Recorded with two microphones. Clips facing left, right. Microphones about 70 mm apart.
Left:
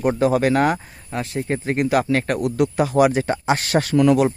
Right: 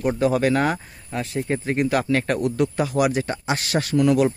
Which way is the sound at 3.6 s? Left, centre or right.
Left.